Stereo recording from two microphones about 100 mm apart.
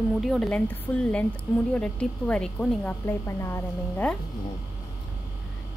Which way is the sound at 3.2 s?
30° left (ahead or behind).